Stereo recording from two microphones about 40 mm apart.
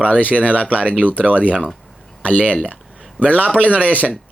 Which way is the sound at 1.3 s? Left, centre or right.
Right.